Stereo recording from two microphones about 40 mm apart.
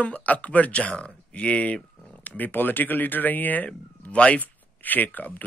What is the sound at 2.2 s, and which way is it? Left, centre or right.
Speech, left.